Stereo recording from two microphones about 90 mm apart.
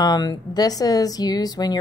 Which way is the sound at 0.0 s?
50° left (ahead or behind).